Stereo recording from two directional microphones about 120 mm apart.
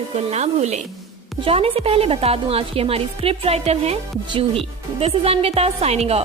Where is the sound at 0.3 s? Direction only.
70° right (ahead or behind).